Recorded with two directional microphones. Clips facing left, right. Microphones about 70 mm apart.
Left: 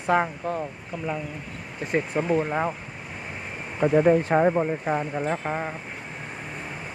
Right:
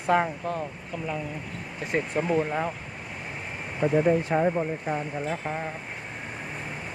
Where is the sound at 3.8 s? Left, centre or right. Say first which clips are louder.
Left 3 dB; left.